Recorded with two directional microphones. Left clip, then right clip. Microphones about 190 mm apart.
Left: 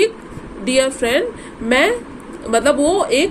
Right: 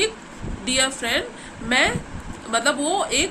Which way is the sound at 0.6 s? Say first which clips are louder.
Left 6 dB; 20° left (ahead or behind).